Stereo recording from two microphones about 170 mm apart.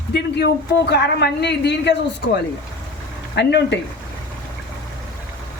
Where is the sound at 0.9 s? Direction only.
75° left (ahead or behind).